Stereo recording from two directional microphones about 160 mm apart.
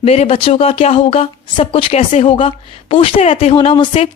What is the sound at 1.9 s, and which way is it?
Speech, 45° left (ahead or behind).